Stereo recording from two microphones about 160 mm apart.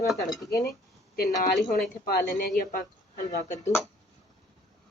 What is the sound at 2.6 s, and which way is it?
Speech, 60° left (ahead or behind).